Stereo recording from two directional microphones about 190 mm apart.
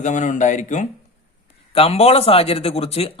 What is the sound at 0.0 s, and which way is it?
Speech, 40° left (ahead or behind).